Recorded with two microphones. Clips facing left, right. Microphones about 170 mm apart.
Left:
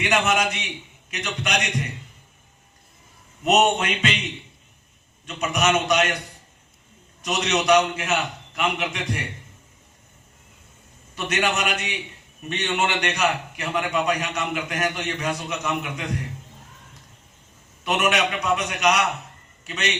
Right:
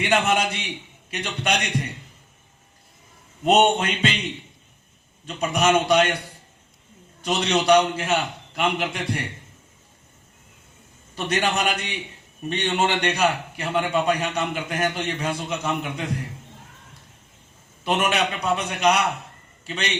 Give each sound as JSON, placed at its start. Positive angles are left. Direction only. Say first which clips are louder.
{"t": 0.0, "sound": "a man's voice", "louder": "right 1 dB", "side_deg": -30}
{"t": 3.4, "sound": "a man's voice", "louder": "right 1 dB", "side_deg": -30}
{"t": 5.2, "sound": "a man's voice", "louder": "right 2 dB", "side_deg": -30}
{"t": 7.2, "sound": "a man's voice", "louder": "right 2 dB", "side_deg": -30}
{"t": 11.1, "sound": "a man's voice", "louder": "right 1 dB", "side_deg": -35}
{"t": 17.8, "sound": "a man's voice", "louder": "even", "side_deg": -30}